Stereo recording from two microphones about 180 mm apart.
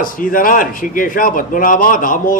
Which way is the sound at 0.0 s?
50° left (ahead or behind).